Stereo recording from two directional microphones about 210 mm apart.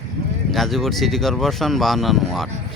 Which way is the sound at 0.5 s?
Centre (ahead or behind).